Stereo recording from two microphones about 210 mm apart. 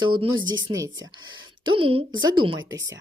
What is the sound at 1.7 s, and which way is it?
Speech, 25° right (ahead or behind).